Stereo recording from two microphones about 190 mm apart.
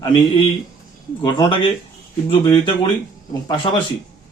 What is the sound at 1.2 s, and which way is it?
Speech, 25° left (ahead or behind).